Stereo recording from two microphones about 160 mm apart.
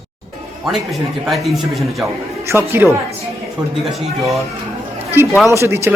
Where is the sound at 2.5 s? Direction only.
15° right (ahead or behind).